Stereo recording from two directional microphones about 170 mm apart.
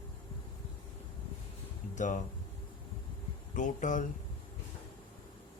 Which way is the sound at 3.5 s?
50° left (ahead or behind).